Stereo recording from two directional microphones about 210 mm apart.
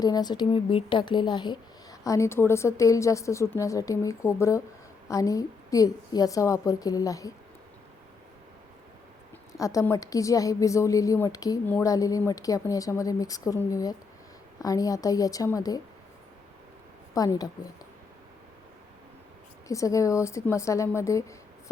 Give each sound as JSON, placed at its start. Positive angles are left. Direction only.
{"t": 0.0, "sound": "speech", "side_deg": 20}
{"t": 9.6, "sound": "speech", "side_deg": 15}
{"t": 17.2, "sound": "speech", "side_deg": 15}
{"t": 19.6, "sound": "speech", "side_deg": 15}